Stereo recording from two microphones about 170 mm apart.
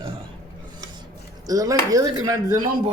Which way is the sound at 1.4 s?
20° right (ahead or behind).